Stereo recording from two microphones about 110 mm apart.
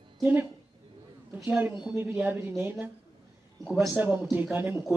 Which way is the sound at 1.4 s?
15° right (ahead or behind).